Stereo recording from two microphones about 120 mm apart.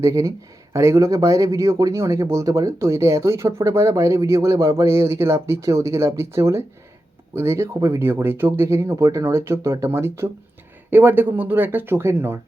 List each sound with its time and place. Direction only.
0.0 s speech: 25° right (ahead or behind)